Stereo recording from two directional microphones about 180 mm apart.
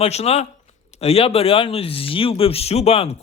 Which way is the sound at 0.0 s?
35° left (ahead or behind).